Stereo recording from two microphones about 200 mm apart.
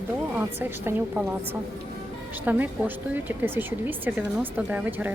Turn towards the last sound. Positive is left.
turn(degrees=-10)  # may be behind; listen again after turning